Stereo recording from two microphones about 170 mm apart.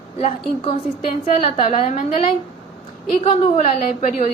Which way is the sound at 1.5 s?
50° left (ahead or behind).